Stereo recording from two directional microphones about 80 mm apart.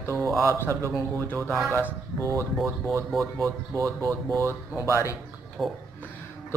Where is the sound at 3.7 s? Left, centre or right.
Right.